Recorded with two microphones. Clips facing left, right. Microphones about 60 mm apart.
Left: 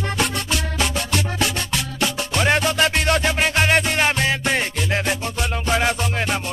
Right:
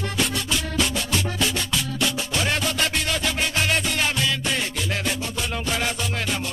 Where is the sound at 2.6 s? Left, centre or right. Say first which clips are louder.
Left 5 dB; left.